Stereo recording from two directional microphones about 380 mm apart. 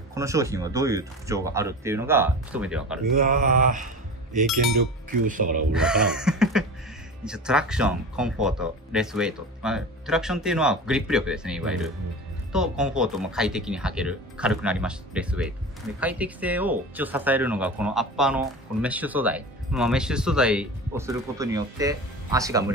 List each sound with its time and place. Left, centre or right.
0.1 s speech: centre
3.0 s mantra: right
5.2 s mantra: right
5.7 s speech: centre